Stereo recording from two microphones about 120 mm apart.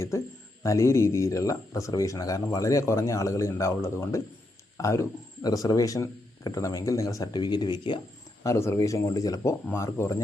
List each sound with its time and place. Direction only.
0.1 s speech: 25° left (ahead or behind); by 7.9 s 40° left (ahead or behind)
8.4 s speech: 20° left (ahead or behind)